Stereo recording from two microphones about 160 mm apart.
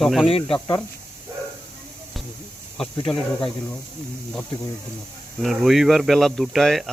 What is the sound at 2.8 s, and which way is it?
Speech, 35° left (ahead or behind).